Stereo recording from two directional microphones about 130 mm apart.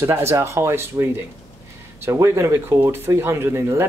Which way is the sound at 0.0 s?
20° right (ahead or behind).